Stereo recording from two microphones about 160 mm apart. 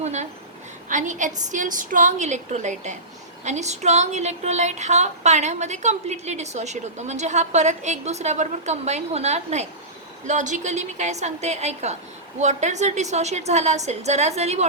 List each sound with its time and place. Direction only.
0.0 s a woman's voice: 45° right (ahead or behind)